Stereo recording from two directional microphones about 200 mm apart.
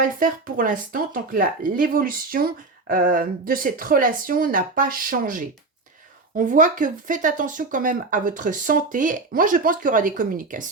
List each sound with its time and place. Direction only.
0.0 s speech: 45° right (ahead or behind)